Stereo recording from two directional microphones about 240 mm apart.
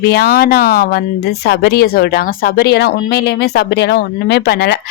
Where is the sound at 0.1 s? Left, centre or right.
Left.